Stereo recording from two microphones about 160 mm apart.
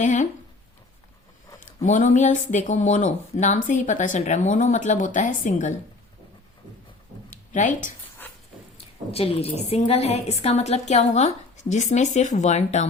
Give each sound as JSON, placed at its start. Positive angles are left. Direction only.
{"t": 0.0, "sound": "speech", "side_deg": 50}
{"t": 1.5, "sound": "speech", "side_deg": 55}
{"t": 7.3, "sound": "a sound", "side_deg": 50}
{"t": 9.1, "sound": "speech", "side_deg": 40}